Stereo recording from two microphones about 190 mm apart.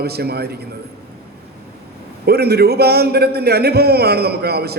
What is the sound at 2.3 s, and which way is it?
A man's voice, 55° right (ahead or behind).